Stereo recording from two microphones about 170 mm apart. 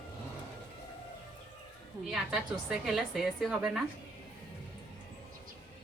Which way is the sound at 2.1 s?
5° right (ahead or behind).